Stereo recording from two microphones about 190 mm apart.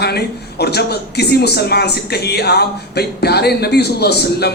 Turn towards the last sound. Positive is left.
turn(degrees=60)  # may be behind; listen again after turning